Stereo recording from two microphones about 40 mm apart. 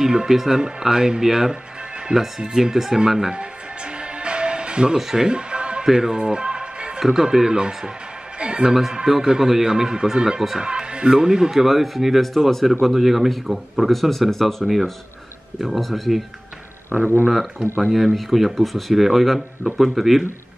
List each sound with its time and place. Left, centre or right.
0.0 s speech: centre
3.3 s music: right
5.9 s music: centre
7.0 s speech: centre
8.4 s music: right
9.0 s speech: centre
11.6 s speech: centre
12.4 s speech: centre
12.8 s speech: centre